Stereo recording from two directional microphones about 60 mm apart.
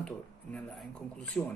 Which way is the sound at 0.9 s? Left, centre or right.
Centre.